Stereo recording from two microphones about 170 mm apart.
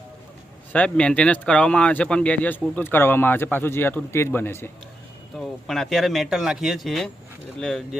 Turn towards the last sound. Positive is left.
turn(degrees=5)  # may be behind; listen again after turning